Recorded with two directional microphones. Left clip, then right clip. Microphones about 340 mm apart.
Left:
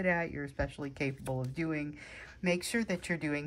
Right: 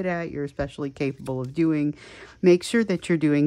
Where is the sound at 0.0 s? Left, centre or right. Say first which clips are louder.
Right 4 dB; centre.